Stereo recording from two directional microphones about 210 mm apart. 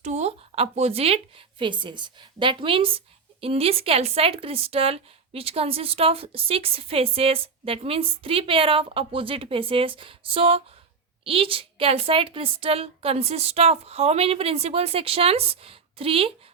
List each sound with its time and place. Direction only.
0.0 s a woman's voice: 30° right (ahead or behind)